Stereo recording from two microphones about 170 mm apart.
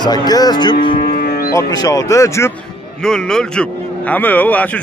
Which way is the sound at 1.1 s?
60° left (ahead or behind).